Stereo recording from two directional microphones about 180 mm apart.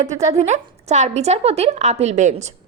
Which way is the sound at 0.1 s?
40° right (ahead or behind).